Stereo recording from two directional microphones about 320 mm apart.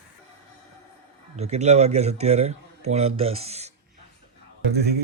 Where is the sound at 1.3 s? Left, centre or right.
Centre.